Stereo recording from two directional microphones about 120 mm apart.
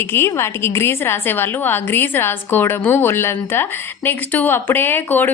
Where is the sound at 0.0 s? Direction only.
20° left (ahead or behind).